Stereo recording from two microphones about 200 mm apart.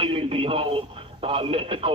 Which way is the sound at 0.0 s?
25° right (ahead or behind).